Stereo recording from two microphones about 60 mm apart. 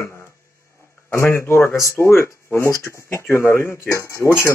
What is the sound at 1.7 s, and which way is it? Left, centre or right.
Speech, left.